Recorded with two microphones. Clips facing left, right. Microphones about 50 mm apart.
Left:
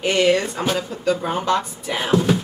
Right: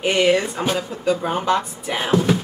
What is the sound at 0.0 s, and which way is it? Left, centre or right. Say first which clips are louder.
Speech: even; centre.